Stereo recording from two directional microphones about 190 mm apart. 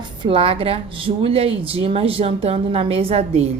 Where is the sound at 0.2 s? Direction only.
30° right (ahead or behind).